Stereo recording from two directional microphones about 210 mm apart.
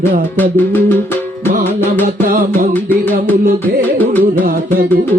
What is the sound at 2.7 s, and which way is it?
Music, 10° left (ahead or behind).